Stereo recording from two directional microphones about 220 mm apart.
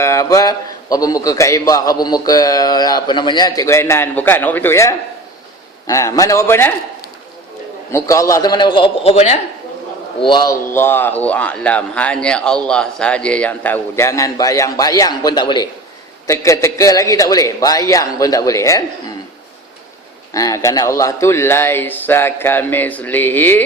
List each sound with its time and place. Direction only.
0.0 s a man's voice: 15° left (ahead or behind)
7.9 s a man's voice: 15° left (ahead or behind)
20.3 s a man's voice: 15° left (ahead or behind)